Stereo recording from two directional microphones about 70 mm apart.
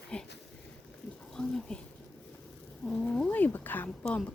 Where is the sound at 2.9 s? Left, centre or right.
Centre.